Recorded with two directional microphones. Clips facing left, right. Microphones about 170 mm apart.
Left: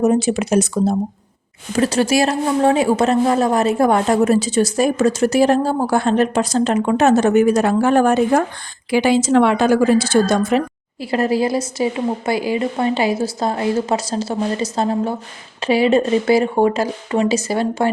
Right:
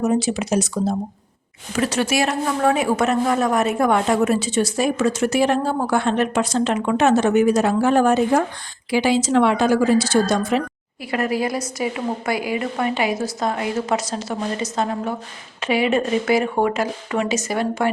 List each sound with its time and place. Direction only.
0.0 s speech: 50° left (ahead or behind)
1.7 s a woman's voice: 35° left (ahead or behind); by 10.6 s 50° left (ahead or behind)
11.0 s a woman's voice: 30° left (ahead or behind)